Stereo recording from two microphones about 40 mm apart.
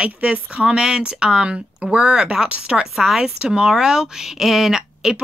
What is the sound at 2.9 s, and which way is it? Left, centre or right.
Speech, centre.